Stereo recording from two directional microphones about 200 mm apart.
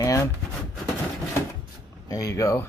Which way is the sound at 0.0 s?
15° left (ahead or behind).